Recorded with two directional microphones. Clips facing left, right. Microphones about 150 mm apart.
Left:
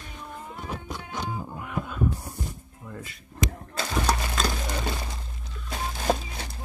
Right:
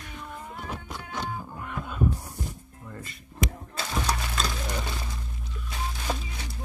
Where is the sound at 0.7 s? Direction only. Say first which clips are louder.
Left 4 dB; centre (ahead or behind).